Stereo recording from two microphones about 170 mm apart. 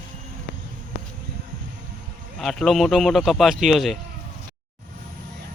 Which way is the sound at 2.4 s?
Centre (ahead or behind).